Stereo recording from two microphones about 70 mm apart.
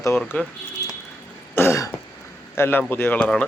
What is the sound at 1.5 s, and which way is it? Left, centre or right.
Throat clearing, left.